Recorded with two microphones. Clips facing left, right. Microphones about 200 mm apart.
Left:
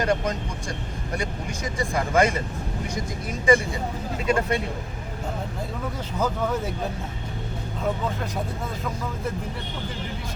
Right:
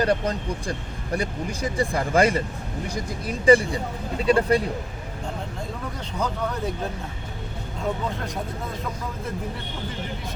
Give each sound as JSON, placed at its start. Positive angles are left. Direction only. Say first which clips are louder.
{"t": 0.0, "sound": "speech", "louder": "right 2 dB", "side_deg": -35}
{"t": 3.4, "sound": "speech", "louder": "right 3 dB", "side_deg": -35}